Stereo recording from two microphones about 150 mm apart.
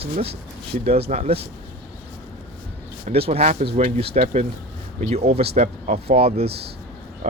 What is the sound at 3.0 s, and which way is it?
Speech, 45° right (ahead or behind).